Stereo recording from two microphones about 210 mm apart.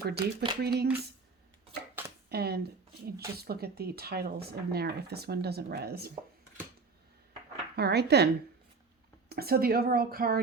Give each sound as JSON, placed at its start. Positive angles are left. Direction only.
{"t": 0.0, "sound": "speech", "side_deg": -45}
{"t": 2.0, "sound": "a sound", "side_deg": -10}
{"t": 2.3, "sound": "speech", "side_deg": -50}
{"t": 7.8, "sound": "speech", "side_deg": -50}
{"t": 9.3, "sound": "speech", "side_deg": -45}